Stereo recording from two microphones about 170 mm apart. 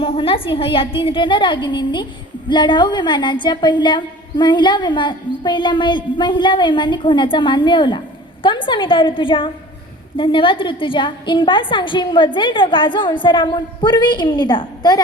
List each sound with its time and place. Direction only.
0.0 s a woman's voice: 30° left (ahead or behind)